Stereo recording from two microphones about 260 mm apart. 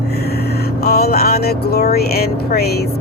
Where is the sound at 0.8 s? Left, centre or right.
Left.